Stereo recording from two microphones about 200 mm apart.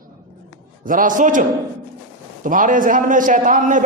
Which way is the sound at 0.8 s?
40° right (ahead or behind).